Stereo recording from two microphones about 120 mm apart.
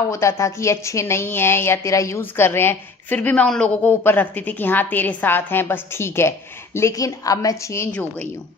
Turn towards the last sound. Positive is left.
turn(degrees=25)  # may be behind; listen again after turning